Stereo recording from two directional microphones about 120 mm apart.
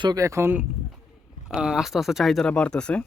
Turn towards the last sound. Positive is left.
turn(degrees=10)  # may be behind; listen again after turning